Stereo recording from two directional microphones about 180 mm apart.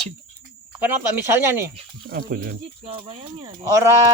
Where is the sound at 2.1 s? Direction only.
55° right (ahead or behind).